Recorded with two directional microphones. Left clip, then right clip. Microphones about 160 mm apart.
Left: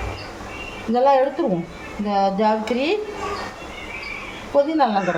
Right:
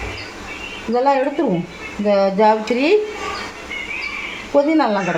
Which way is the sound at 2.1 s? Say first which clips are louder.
Right 5 dB; 50° right (ahead or behind).